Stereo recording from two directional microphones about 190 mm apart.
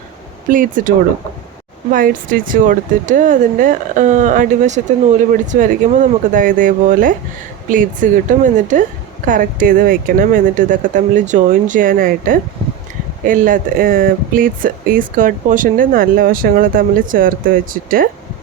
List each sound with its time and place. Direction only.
0.4 s speech: 45° right (ahead or behind)